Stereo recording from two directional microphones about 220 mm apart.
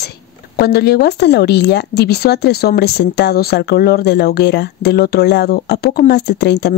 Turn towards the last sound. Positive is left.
turn(degrees=45)  # may be behind; listen again after turning